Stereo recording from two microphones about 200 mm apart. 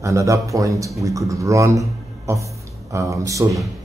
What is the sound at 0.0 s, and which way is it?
Speech, 15° right (ahead or behind).